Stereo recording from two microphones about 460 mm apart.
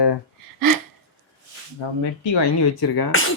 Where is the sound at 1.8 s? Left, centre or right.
Left.